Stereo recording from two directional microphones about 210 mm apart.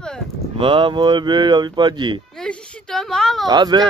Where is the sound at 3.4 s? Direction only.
20° right (ahead or behind).